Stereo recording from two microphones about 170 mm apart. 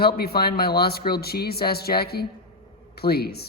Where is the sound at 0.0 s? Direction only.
65° left (ahead or behind).